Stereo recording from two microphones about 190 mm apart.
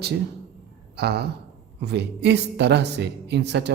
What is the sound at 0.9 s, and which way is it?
A man's voice, 60° right (ahead or behind).